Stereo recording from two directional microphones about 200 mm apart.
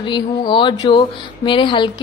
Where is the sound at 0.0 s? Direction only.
25° left (ahead or behind).